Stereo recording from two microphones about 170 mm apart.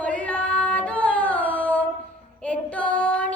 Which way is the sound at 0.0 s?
10° left (ahead or behind).